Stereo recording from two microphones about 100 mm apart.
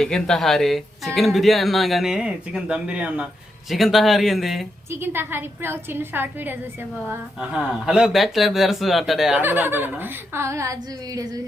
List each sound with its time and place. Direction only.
0.0 s speech: 5° left (ahead or behind); by 3.2 s 10° right (ahead or behind)
3.7 s speech: centre (ahead or behind)
4.9 s a woman's voice: 20° right (ahead or behind)
7.3 s speech: 5° right (ahead or behind)
9.4 s a woman's voice: 20° right (ahead or behind)